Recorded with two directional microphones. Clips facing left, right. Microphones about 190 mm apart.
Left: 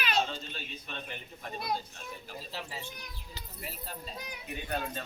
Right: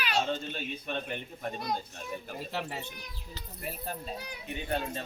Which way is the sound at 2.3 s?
60° right (ahead or behind).